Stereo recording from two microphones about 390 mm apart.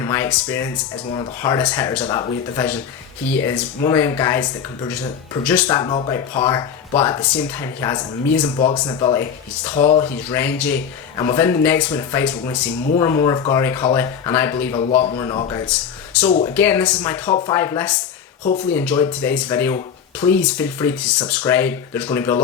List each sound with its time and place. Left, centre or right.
0.0 s speech: centre
18.4 s speech: centre
18.7 s speech: centre